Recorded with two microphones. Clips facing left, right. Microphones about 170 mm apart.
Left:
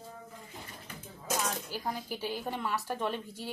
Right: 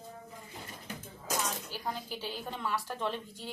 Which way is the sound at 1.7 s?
10° left (ahead or behind).